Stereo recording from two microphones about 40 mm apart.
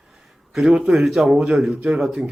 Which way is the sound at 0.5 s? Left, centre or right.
Centre.